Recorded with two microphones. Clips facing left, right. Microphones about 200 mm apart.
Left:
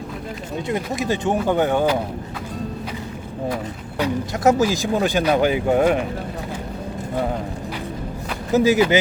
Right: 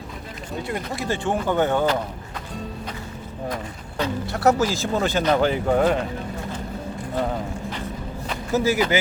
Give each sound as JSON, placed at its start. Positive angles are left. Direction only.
{"t": 0.7, "sound": "speech", "side_deg": 20}
{"t": 3.5, "sound": "speech", "side_deg": 10}
{"t": 8.5, "sound": "speech", "side_deg": 15}